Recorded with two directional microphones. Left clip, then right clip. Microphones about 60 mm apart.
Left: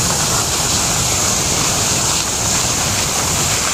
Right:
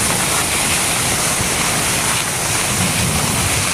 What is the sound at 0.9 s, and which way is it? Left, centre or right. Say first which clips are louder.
Waterfall: left 1 dB; right.